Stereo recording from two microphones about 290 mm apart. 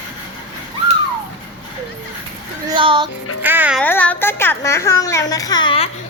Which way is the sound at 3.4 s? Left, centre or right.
Centre.